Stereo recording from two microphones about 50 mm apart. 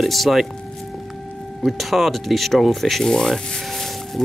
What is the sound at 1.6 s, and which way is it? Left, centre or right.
Speech, centre.